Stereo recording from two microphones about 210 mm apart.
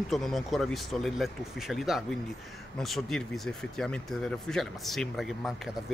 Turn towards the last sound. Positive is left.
turn(degrees=0)  # may be behind; listen again after turning